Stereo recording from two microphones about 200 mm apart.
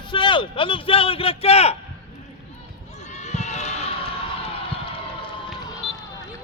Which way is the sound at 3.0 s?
35° left (ahead or behind).